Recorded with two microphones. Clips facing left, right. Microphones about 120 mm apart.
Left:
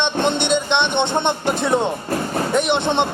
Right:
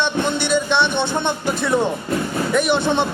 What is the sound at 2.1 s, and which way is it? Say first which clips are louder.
Music: even; 45° left (ahead or behind).